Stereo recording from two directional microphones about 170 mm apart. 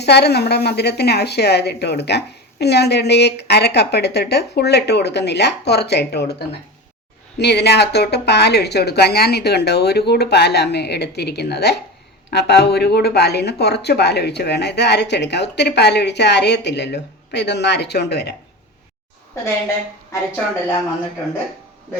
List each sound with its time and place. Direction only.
0.0 s speech: 75° left (ahead or behind)
7.3 s speech: 80° left